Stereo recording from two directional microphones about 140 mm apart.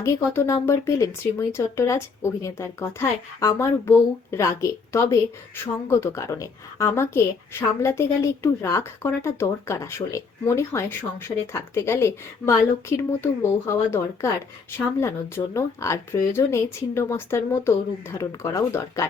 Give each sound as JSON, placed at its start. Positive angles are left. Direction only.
{"t": 0.6, "sound": "speech", "side_deg": 20}